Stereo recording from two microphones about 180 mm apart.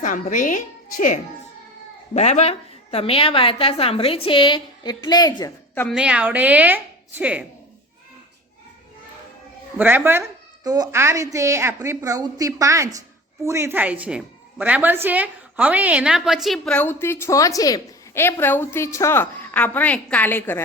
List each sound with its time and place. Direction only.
0.0 s a woman's voice: 45° left (ahead or behind); by 5.5 s 20° left (ahead or behind)
5.9 s a woman's voice: 5° right (ahead or behind)
9.7 s a woman's voice: 10° right (ahead or behind); by 20.7 s 10° left (ahead or behind)